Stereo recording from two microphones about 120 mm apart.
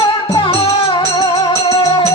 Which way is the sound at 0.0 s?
45° left (ahead or behind).